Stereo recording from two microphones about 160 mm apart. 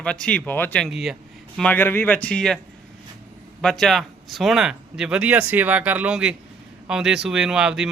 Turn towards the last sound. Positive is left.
turn(degrees=-5)  # may be behind; listen again after turning